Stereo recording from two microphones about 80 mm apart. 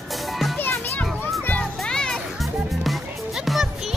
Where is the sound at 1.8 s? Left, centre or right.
Centre.